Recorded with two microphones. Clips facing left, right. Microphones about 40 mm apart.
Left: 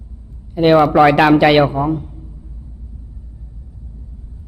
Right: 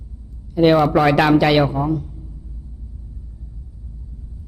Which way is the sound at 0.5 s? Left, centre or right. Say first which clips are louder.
Left 3 dB; centre.